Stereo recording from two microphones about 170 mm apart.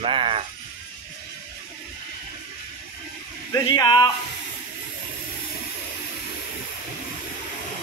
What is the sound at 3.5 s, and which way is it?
Speech, 25° left (ahead or behind).